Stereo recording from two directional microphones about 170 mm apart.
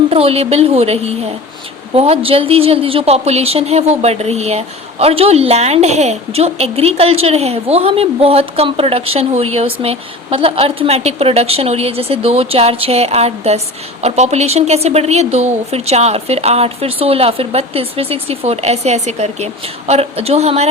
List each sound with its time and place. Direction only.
0.1 s a woman's voice: 35° right (ahead or behind)